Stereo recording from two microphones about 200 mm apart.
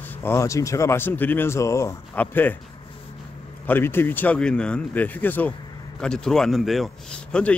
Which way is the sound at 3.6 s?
10° left (ahead or behind).